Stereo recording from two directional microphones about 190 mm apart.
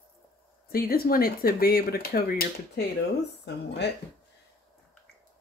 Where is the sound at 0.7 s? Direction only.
50° left (ahead or behind).